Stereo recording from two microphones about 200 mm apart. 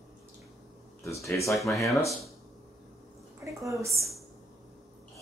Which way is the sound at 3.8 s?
15° right (ahead or behind).